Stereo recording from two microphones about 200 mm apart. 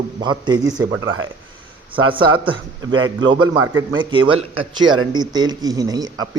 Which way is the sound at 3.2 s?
25° right (ahead or behind).